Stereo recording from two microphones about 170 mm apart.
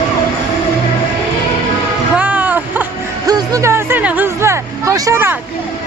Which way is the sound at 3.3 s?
20° right (ahead or behind).